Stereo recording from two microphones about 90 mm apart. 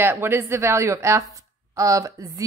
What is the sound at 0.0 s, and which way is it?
Speech, 30° right (ahead or behind).